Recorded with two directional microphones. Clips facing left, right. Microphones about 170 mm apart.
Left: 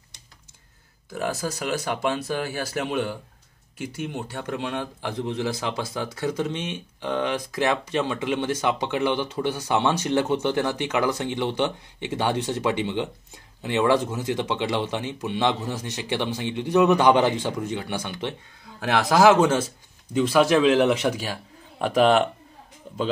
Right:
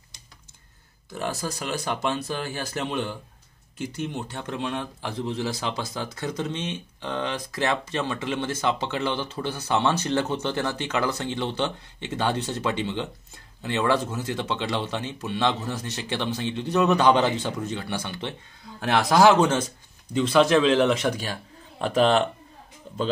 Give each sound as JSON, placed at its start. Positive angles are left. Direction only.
{"t": 1.2, "sound": "speech", "side_deg": 10}